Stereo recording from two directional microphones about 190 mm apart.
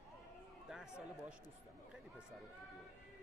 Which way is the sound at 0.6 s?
5° right (ahead or behind).